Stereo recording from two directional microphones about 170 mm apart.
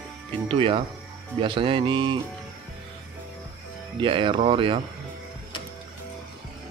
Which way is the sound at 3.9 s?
30° right (ahead or behind).